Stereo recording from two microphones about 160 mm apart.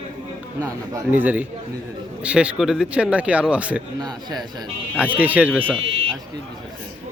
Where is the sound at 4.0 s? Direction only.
25° right (ahead or behind).